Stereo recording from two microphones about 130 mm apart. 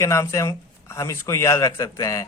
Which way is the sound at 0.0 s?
25° left (ahead or behind).